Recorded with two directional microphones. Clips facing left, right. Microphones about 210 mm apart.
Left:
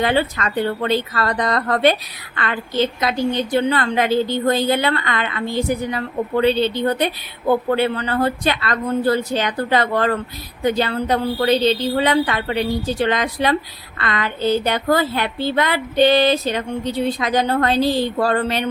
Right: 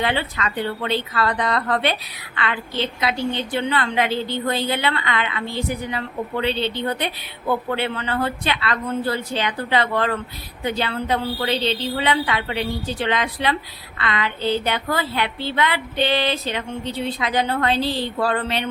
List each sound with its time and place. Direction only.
0.0 s a woman's voice: 40° left (ahead or behind)